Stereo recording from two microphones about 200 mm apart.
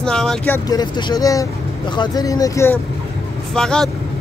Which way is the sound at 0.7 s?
20° left (ahead or behind).